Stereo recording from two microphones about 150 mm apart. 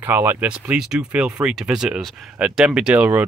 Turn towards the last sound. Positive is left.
turn(degrees=-10)  # may be behind; listen again after turning